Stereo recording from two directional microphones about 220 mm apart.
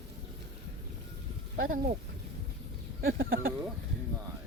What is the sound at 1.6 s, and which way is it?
Speech, 40° right (ahead or behind).